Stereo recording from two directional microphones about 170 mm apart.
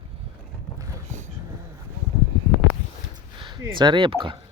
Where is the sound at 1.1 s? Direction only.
45° right (ahead or behind).